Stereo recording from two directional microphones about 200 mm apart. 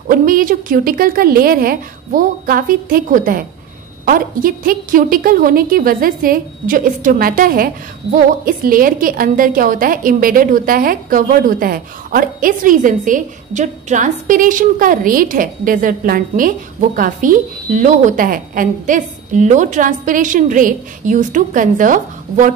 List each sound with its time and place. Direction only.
0.1 s a woman's voice: 45° right (ahead or behind)